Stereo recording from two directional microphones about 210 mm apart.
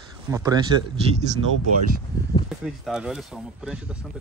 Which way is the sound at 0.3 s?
15° right (ahead or behind).